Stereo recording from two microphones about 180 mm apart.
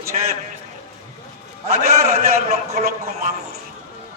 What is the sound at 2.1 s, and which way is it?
Speech, 35° right (ahead or behind).